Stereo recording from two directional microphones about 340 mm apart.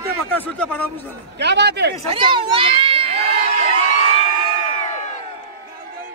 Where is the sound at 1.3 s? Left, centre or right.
Right.